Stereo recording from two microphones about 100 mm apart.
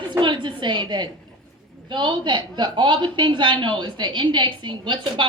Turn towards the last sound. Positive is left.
turn(degrees=-50)  # may be behind; listen again after turning